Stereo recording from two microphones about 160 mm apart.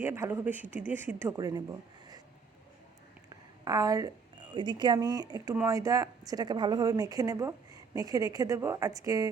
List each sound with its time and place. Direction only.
0.0 s speech: 15° right (ahead or behind)
3.2 s a sound: 25° right (ahead or behind)
4.5 s a woman's voice: 30° right (ahead or behind)